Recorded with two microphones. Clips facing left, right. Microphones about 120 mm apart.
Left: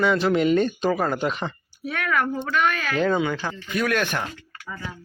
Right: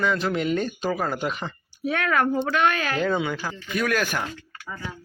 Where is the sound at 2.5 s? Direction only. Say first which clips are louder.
Right 1 dB; 5° right (ahead or behind).